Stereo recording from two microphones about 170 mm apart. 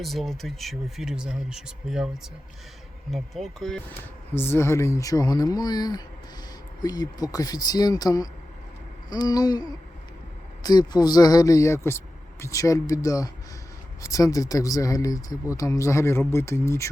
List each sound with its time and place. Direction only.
0.0 s speech: centre (ahead or behind)
3.1 s speech: centre (ahead or behind)
4.4 s speech: 15° left (ahead or behind)